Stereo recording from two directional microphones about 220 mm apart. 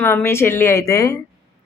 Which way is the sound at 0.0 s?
10° left (ahead or behind).